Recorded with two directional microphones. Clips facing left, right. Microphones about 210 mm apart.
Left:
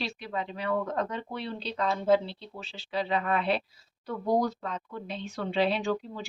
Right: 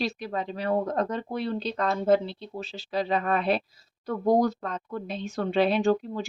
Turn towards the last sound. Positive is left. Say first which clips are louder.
# right 7 dB
turn(degrees=-45)  # may be behind; listen again after turning